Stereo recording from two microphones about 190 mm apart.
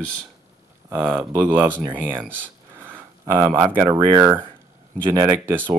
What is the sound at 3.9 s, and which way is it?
Speech, 25° right (ahead or behind).